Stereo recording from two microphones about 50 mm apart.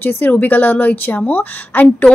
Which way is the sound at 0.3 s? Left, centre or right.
Left.